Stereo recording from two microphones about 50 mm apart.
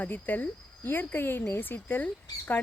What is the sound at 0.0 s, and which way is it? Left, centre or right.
Speech, left.